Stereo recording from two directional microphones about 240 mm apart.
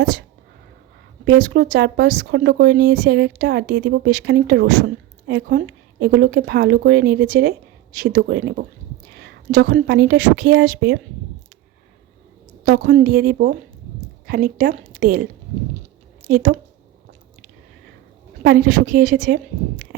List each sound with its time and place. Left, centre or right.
1.2 s speech: right
12.6 s speech: right
18.4 s speech: right